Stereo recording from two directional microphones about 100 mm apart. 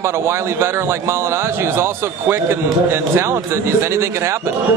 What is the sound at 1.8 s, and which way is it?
A man's voice, 25° right (ahead or behind).